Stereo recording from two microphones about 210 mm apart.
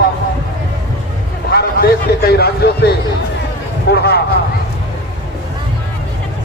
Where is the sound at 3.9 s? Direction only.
50° left (ahead or behind).